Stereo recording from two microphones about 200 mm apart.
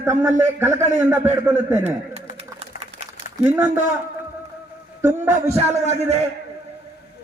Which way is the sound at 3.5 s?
10° right (ahead or behind).